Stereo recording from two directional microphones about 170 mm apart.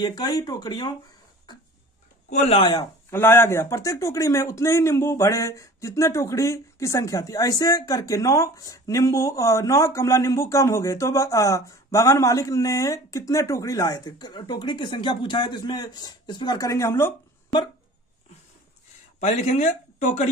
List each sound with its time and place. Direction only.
0.0 s speech: 25° left (ahead or behind)
2.2 s speech: 40° left (ahead or behind)
2.8 s speech: 15° left (ahead or behind)
19.1 s speech: 45° left (ahead or behind)